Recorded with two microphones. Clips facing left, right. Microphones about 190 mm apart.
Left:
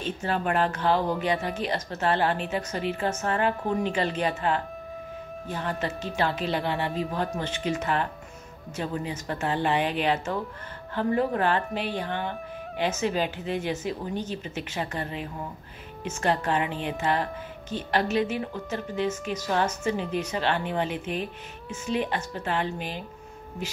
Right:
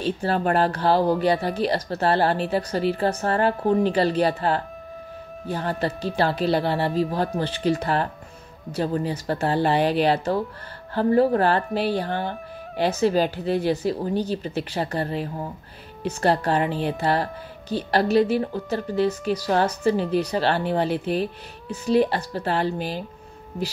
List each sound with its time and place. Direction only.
0.0 s speech: 35° right (ahead or behind)